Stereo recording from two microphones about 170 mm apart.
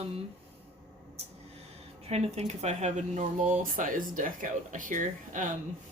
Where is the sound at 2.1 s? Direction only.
40° right (ahead or behind).